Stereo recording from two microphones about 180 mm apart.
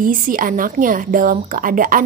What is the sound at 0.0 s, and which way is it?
Speech, 50° right (ahead or behind).